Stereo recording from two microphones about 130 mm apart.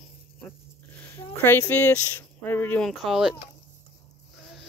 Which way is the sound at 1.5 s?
15° left (ahead or behind).